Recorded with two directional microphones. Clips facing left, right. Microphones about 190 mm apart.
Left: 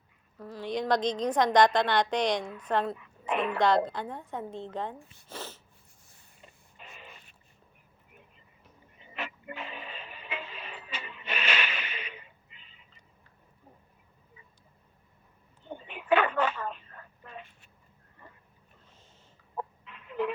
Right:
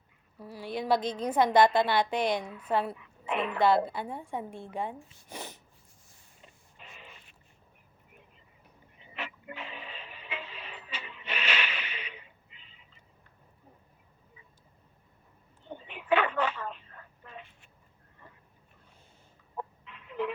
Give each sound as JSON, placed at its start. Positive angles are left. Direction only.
{"t": 0.3, "sound": "a woman's voice", "side_deg": -10}
{"t": 2.9, "sound": "speech", "side_deg": 45}
{"t": 3.6, "sound": "a woman's voice", "side_deg": -5}
{"t": 5.3, "sound": "sneeze", "side_deg": -15}
{"t": 6.7, "sound": "printer", "side_deg": 45}
{"t": 9.1, "sound": "music", "side_deg": 45}
{"t": 15.9, "sound": "telephone", "side_deg": 45}
{"t": 19.5, "sound": "chicken", "side_deg": 45}